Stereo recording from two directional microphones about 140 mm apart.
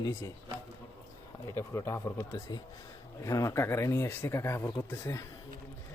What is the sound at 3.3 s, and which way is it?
Speech, 25° left (ahead or behind).